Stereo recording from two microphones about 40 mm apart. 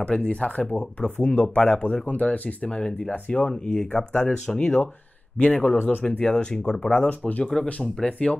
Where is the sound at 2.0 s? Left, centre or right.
Left.